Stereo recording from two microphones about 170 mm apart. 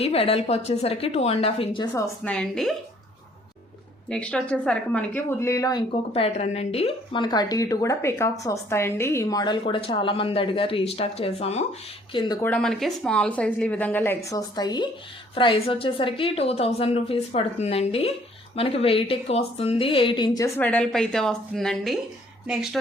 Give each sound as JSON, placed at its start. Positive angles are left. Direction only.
{"t": 0.0, "sound": "a woman's voice", "side_deg": 35}
{"t": 2.2, "sound": "a woman's voice", "side_deg": 5}
{"t": 4.1, "sound": "a woman's voice", "side_deg": 5}
{"t": 6.1, "sound": "a woman's voice", "side_deg": 40}
{"t": 12.4, "sound": "a woman's voice", "side_deg": 5}
{"t": 20.6, "sound": "a woman's voice", "side_deg": 10}